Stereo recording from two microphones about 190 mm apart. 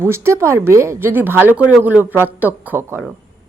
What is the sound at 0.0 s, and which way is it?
A woman's voice, 15° right (ahead or behind).